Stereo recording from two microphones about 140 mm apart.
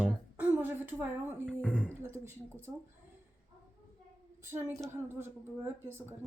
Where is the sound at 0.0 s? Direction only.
10° right (ahead or behind).